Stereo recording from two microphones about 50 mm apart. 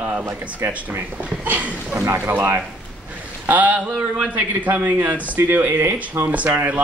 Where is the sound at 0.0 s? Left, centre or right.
Right.